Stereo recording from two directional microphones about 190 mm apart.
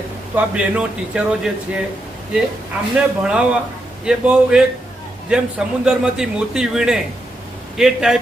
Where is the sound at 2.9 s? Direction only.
5° right (ahead or behind).